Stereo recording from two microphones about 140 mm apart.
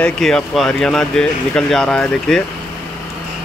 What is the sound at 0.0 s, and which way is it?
Speech, 5° left (ahead or behind).